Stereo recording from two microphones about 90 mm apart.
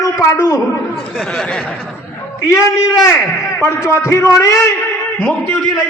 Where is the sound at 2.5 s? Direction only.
30° left (ahead or behind).